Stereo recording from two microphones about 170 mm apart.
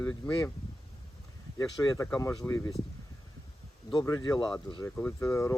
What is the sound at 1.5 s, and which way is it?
Speech, 20° left (ahead or behind).